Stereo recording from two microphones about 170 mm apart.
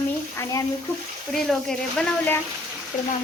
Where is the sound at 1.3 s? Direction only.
5° left (ahead or behind).